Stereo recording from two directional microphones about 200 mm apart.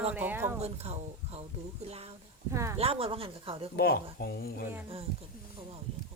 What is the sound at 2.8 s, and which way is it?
Speech, 30° right (ahead or behind).